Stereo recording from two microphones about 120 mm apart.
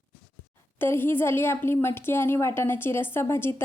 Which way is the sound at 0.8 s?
20° left (ahead or behind).